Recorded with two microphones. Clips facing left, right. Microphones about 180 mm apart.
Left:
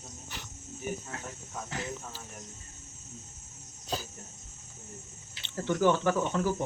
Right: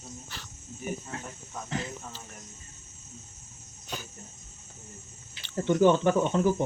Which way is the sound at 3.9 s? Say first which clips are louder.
Left 4 dB; 35° left (ahead or behind).